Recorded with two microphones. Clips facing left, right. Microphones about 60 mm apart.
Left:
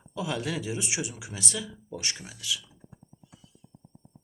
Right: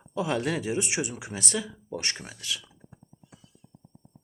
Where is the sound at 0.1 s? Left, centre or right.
Right.